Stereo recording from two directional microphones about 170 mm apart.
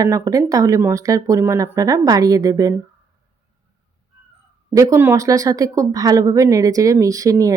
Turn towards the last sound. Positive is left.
turn(degrees=-20)  # may be behind; listen again after turning